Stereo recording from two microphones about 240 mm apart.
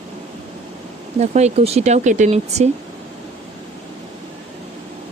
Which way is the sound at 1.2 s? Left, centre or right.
Right.